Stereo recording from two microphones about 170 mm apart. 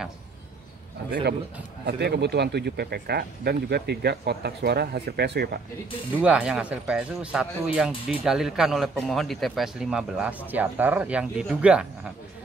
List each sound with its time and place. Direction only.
1.9 s speech: 75° right (ahead or behind)
6.2 s speech: 5° right (ahead or behind)